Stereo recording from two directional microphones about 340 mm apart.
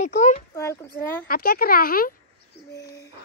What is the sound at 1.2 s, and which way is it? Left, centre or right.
Speech, left.